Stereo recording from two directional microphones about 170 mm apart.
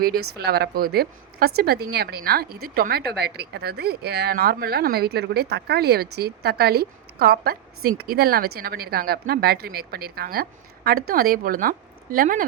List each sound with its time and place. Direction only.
0.0 s a woman's voice: 65° right (ahead or behind)